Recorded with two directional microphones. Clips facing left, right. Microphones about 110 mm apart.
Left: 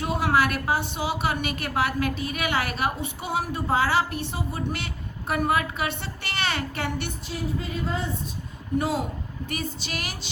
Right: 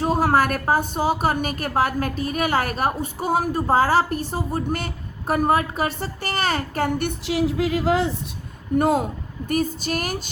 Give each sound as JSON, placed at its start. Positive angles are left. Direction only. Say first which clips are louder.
{"t": 0.0, "sound": "a woman's voice", "louder": "right 4 dB", "side_deg": -40}
{"t": 7.1, "sound": "speech", "louder": "right 8 dB", "side_deg": -85}
{"t": 8.8, "sound": "a woman's voice", "louder": "right 9 dB", "side_deg": -50}